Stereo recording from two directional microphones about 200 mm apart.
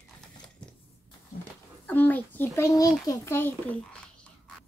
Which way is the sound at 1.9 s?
10° left (ahead or behind).